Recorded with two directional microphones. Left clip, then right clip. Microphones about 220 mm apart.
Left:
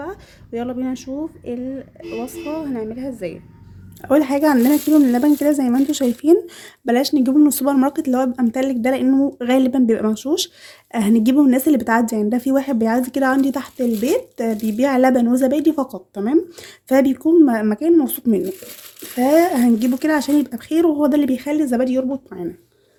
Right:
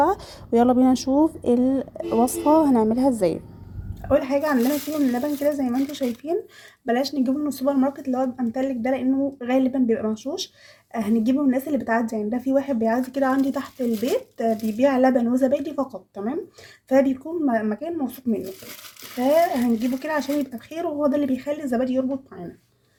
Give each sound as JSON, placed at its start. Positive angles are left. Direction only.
{"t": 0.0, "sound": "speech", "side_deg": -15}
{"t": 4.0, "sound": "speech", "side_deg": 35}